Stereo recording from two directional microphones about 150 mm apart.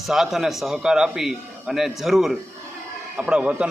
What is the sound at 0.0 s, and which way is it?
A man's voice, centre (ahead or behind).